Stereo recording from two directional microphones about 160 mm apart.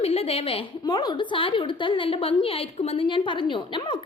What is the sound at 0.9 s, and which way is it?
A woman's voice, 25° left (ahead or behind).